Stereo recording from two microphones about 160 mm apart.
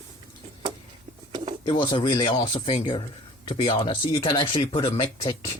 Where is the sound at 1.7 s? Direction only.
30° left (ahead or behind).